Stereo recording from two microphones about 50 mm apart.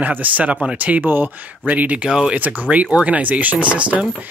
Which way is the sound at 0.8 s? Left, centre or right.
Right.